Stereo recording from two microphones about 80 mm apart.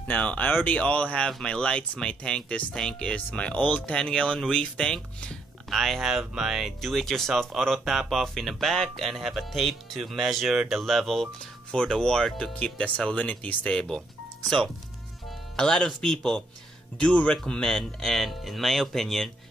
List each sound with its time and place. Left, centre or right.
0.0 s speech: centre